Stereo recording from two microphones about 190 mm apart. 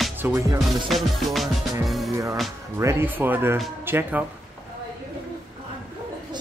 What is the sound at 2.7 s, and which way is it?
Speech, 10° right (ahead or behind).